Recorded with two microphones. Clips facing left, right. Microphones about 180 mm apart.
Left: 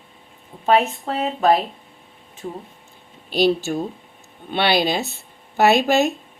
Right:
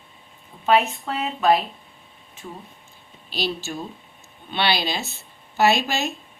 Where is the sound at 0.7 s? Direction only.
35° left (ahead or behind).